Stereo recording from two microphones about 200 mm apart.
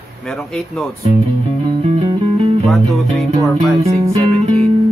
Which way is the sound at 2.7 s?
Centre (ahead or behind).